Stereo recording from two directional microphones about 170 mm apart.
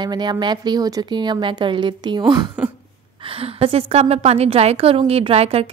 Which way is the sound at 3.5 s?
35° right (ahead or behind).